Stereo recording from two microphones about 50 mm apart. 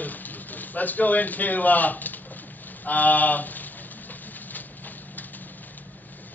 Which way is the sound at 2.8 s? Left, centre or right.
Left.